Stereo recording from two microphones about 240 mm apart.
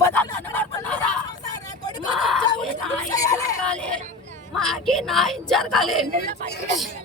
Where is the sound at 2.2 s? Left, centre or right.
Centre.